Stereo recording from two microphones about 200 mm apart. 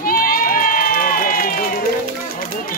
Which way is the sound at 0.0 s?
45° left (ahead or behind).